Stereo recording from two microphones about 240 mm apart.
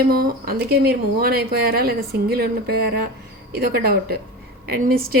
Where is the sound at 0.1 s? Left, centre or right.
Right.